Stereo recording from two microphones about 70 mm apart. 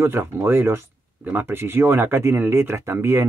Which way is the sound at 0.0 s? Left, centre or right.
Right.